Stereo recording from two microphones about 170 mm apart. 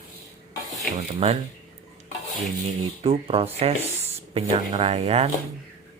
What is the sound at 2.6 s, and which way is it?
Speech, 35° right (ahead or behind).